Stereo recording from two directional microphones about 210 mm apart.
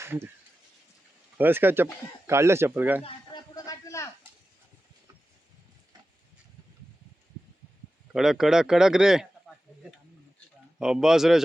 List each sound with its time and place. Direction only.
0.0 s speech: 10° right (ahead or behind)
1.4 s speech: 10° right (ahead or behind)
3.0 s a sound: 20° left (ahead or behind)
8.1 s speech: centre (ahead or behind)
10.8 s speech: 5° right (ahead or behind)